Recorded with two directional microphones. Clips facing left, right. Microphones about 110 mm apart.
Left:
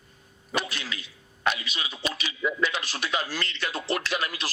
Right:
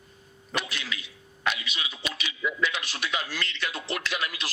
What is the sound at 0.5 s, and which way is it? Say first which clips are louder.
A man's voice: left 2 dB; 35° left (ahead or behind).